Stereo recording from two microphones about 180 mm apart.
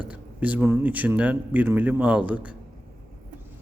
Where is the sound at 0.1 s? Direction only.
10° right (ahead or behind).